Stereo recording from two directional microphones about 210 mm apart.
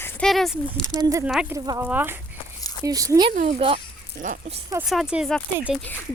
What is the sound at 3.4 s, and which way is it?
Speech, 30° right (ahead or behind).